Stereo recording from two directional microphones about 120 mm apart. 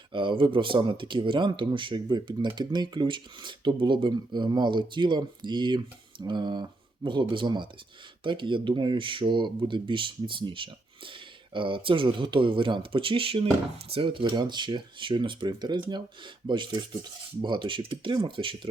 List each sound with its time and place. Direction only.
0.1 s speech: 45° right (ahead or behind)